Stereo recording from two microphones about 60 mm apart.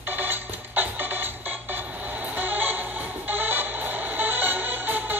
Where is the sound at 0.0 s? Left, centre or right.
Right.